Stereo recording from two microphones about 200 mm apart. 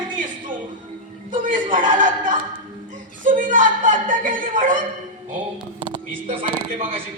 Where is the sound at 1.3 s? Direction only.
40° right (ahead or behind).